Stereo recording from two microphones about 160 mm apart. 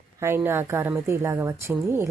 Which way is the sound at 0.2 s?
15° right (ahead or behind).